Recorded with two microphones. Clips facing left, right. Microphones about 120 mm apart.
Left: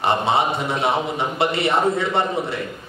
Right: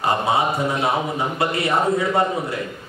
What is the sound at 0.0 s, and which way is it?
A man's voice, 25° left (ahead or behind).